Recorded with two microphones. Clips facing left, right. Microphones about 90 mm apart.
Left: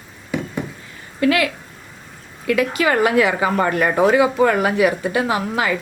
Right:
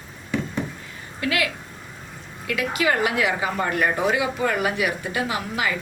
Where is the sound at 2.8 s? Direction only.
45° left (ahead or behind).